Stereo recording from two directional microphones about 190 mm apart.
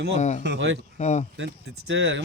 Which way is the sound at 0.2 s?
40° left (ahead or behind).